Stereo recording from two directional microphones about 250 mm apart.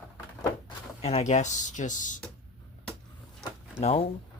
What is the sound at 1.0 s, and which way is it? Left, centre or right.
Speech, left.